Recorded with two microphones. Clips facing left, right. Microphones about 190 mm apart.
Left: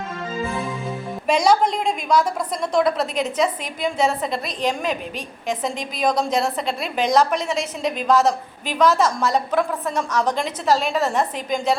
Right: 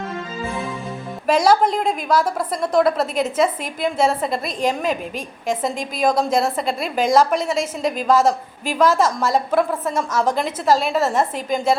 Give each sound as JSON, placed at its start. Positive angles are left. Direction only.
{"t": 1.3, "sound": "a woman's voice", "side_deg": -5}
{"t": 6.8, "sound": "a woman's voice", "side_deg": -45}
{"t": 7.1, "sound": "a woman's voice", "side_deg": -5}